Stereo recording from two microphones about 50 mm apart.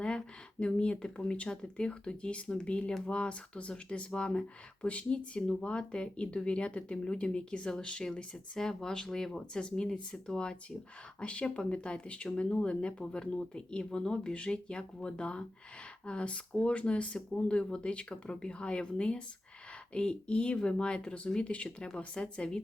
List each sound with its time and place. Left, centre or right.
0.0 s speech: centre